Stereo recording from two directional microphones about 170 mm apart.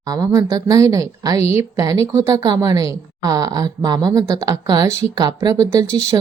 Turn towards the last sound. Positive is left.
turn(degrees=-20)  # may be behind; listen again after turning